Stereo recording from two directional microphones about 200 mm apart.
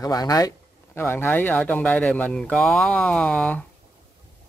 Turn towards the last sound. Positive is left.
turn(degrees=5)  # may be behind; listen again after turning